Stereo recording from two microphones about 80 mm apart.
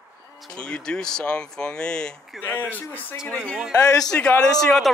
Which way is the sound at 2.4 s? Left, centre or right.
Left.